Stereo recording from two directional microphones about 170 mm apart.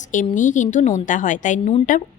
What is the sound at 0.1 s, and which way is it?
Speech, 50° left (ahead or behind).